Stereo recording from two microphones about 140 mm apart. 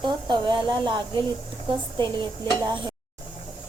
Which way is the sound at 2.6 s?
35° right (ahead or behind).